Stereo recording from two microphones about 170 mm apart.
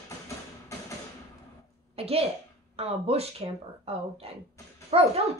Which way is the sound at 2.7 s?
35° right (ahead or behind).